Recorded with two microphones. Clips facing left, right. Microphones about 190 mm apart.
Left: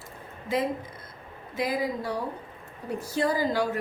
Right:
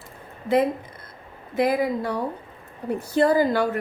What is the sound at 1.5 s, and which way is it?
A woman's voice, 60° right (ahead or behind).